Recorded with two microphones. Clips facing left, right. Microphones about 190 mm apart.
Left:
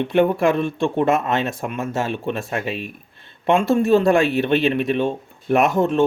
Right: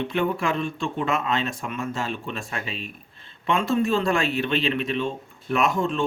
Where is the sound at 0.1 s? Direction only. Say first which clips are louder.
Left 11 dB; 60° left (ahead or behind).